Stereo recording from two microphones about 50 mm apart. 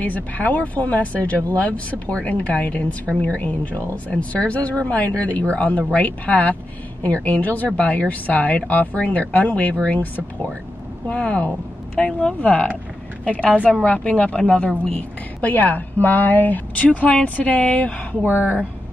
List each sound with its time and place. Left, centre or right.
0.0 s a woman's voice: left
11.1 s speech: left
13.7 s a woman's voice: centre
15.0 s a woman's voice: left
18.2 s a woman's voice: left